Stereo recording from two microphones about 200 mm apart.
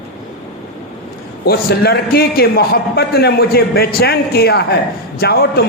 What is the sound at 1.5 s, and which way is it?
A man's voice, 50° left (ahead or behind).